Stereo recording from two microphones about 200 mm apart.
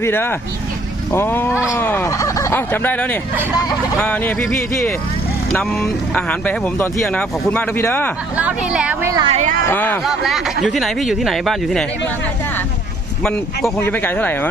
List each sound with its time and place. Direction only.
0.0 s speech: 10° left (ahead or behind)
8.4 s speech: 5° right (ahead or behind)
9.2 s a woman's voice: 35° right (ahead or behind)
9.6 s speech: 10° left (ahead or behind)
13.2 s speech: 5° left (ahead or behind)